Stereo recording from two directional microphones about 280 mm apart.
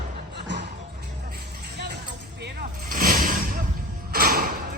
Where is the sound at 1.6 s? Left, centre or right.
Right.